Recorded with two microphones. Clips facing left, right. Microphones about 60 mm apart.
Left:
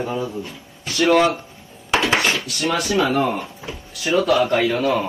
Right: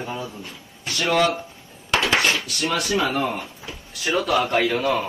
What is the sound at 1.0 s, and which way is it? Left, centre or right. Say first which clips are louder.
Speech: left 5 dB; left.